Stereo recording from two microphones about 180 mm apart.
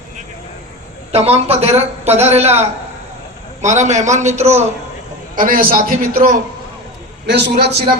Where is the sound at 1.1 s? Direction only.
35° right (ahead or behind).